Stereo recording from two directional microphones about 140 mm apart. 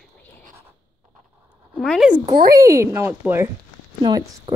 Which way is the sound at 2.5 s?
20° right (ahead or behind).